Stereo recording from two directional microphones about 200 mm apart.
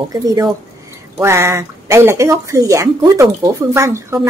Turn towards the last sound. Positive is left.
turn(degrees=-15)  # may be behind; listen again after turning